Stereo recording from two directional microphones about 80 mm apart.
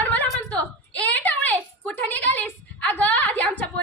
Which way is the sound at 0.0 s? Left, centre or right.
Left.